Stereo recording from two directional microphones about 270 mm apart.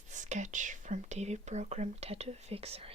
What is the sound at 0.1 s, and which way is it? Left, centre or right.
Speech, right.